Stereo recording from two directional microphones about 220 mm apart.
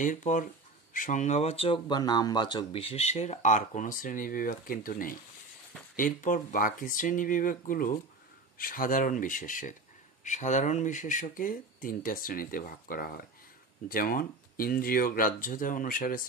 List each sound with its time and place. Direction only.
0.0 s speech: 35° left (ahead or behind)